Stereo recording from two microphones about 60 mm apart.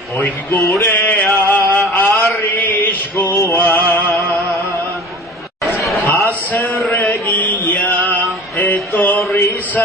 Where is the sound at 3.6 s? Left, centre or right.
Left.